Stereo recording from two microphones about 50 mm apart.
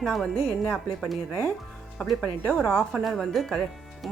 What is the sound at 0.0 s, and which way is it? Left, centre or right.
Speech, centre.